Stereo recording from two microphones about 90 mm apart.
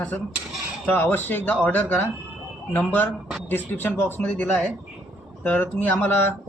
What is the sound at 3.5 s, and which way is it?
Speech, 25° left (ahead or behind).